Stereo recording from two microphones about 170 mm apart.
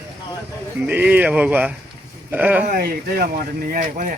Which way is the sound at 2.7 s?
60° right (ahead or behind).